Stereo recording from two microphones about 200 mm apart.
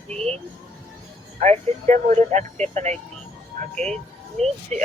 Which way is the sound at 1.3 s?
35° right (ahead or behind).